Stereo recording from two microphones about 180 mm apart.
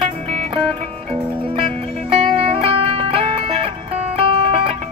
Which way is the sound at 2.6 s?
30° right (ahead or behind).